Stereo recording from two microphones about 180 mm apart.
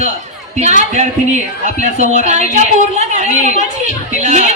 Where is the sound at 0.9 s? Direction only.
40° right (ahead or behind).